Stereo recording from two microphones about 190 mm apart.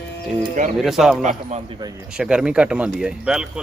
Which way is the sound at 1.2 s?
35° right (ahead or behind).